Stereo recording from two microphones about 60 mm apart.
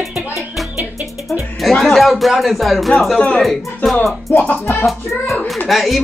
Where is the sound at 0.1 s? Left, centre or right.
Right.